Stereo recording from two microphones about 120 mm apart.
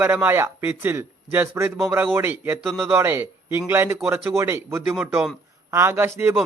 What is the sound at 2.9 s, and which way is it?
Speech, 20° right (ahead or behind).